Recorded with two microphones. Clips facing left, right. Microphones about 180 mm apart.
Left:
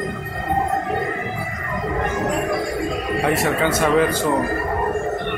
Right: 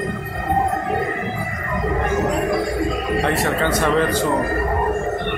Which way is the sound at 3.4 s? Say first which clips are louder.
Even; 10° left (ahead or behind).